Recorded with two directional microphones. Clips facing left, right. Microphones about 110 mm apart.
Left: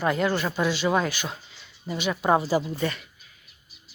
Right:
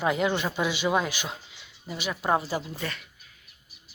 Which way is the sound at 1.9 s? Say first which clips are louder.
Left 4 dB; centre (ahead or behind).